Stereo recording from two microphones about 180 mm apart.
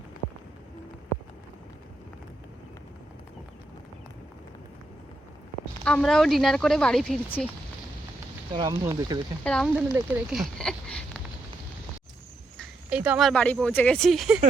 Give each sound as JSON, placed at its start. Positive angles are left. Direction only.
{"t": 5.8, "sound": "speech", "side_deg": 5}
{"t": 8.5, "sound": "speech", "side_deg": -20}
{"t": 9.4, "sound": "speech", "side_deg": 5}
{"t": 9.9, "sound": "speech", "side_deg": -5}
{"t": 12.5, "sound": "speech", "side_deg": -5}